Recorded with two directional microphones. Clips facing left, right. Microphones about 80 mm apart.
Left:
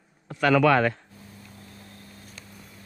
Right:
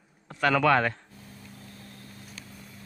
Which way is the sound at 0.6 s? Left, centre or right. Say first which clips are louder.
Left 3 dB; centre.